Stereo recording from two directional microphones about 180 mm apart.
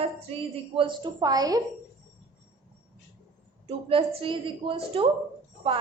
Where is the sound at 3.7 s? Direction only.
30° right (ahead or behind).